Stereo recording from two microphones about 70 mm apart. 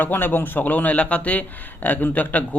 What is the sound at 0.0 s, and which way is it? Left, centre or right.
A man's voice, left.